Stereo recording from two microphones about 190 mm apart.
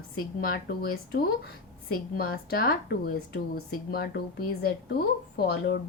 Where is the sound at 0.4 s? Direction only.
50° left (ahead or behind).